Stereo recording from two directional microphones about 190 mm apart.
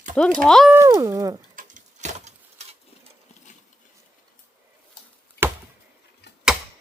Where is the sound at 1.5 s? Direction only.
40° right (ahead or behind).